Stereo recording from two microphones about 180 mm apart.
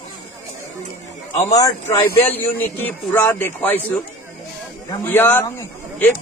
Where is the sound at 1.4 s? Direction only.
15° left (ahead or behind).